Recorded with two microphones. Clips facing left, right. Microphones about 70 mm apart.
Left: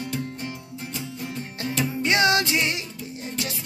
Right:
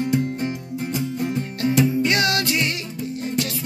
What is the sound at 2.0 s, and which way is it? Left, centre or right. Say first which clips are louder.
Music: even; left.